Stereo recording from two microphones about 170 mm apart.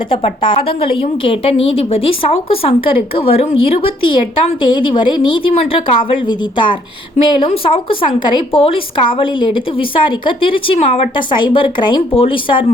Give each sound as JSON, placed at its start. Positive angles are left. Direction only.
{"t": 0.1, "sound": "a woman's voice", "side_deg": 30}